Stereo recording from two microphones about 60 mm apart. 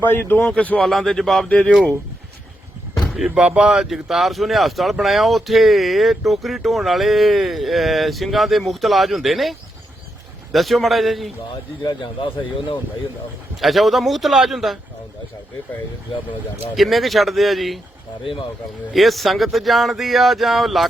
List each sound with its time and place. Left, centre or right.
0.0 s speech: left
0.4 s speech: left
0.8 s speech: centre
1.5 s speech: centre
2.9 s speech: centre
13.6 s speech: centre
16.7 s speech: centre
18.9 s speech: centre